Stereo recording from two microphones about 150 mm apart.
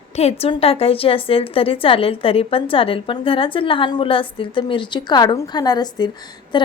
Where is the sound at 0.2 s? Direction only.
45° left (ahead or behind).